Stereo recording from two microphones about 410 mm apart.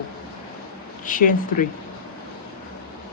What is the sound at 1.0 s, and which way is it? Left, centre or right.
Speech, centre.